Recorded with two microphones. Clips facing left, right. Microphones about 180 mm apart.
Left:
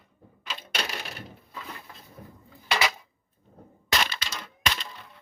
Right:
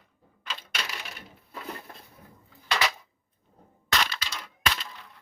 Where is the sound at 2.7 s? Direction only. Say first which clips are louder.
Left 1 dB; 10° left (ahead or behind).